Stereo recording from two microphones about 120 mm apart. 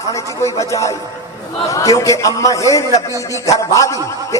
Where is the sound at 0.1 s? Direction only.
25° left (ahead or behind).